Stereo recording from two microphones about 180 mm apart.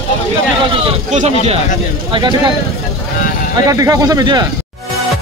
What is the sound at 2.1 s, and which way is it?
Speech, 25° right (ahead or behind).